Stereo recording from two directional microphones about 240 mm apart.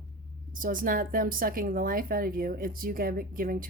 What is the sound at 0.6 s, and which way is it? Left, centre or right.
A woman's voice, right.